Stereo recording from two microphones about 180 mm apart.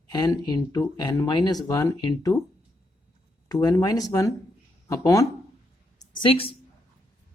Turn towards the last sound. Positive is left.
turn(degrees=30)  # may be behind; listen again after turning